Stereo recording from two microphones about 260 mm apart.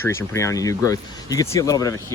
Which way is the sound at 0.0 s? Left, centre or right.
Centre.